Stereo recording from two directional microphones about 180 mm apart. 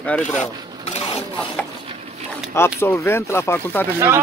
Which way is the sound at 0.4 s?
35° left (ahead or behind).